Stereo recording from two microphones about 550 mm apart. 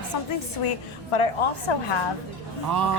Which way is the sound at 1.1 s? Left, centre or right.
Left.